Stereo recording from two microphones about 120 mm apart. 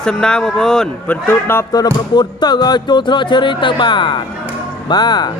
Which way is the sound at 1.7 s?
35° left (ahead or behind).